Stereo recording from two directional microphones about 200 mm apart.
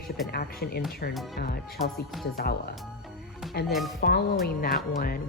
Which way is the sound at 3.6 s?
50° left (ahead or behind).